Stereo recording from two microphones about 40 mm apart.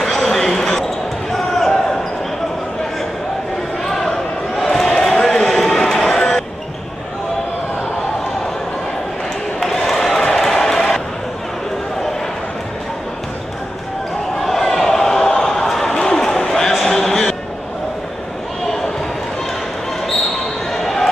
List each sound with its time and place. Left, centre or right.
0.0 s basketball bounce: centre
3.8 s basketball bounce: centre
4.6 s a sound: centre
9.6 s basketball bounce: centre
14.4 s a sound: centre
20.7 s basketball bounce: centre